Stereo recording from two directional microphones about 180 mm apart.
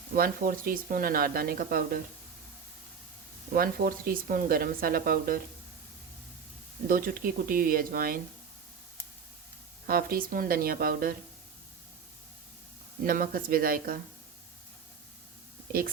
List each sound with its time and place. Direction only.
0.1 s speech: 50° right (ahead or behind)
3.5 s speech: 50° right (ahead or behind)
6.8 s speech: 50° right (ahead or behind)
9.8 s speech: 55° right (ahead or behind)
13.1 s speech: 50° right (ahead or behind)